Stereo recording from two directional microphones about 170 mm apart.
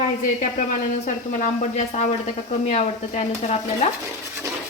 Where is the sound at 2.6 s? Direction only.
40° left (ahead or behind).